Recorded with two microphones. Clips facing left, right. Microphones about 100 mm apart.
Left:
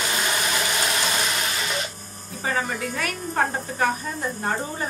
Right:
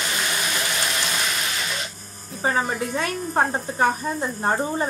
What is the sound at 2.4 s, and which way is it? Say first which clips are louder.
A woman's voice: right 3 dB; 30° right (ahead or behind).